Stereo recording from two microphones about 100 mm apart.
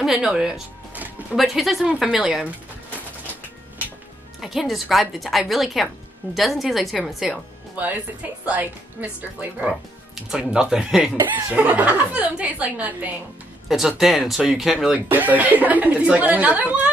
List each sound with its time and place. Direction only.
0.0 s music: 5° right (ahead or behind)
1.3 s speech: centre (ahead or behind)
4.4 s speech: 5° right (ahead or behind)
7.7 s speech: 15° right (ahead or behind)
11.1 s speech: 25° right (ahead or behind)
11.5 s speech: 15° right (ahead or behind)
13.7 s speech: 5° right (ahead or behind)
15.0 s speech: 15° right (ahead or behind)